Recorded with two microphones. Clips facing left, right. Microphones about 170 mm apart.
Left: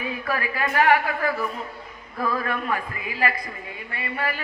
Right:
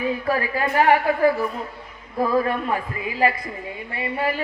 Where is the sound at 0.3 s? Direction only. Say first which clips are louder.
Right 1 dB; 30° right (ahead or behind).